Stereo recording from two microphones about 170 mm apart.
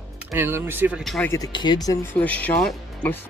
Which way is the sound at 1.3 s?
25° left (ahead or behind).